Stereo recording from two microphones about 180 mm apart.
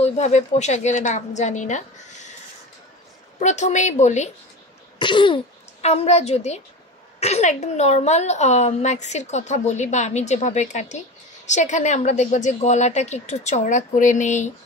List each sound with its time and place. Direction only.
0.0 s a woman's voice: 35° left (ahead or behind)
3.3 s a woman's voice: 40° left (ahead or behind)
4.9 s a child's voice: 25° left (ahead or behind)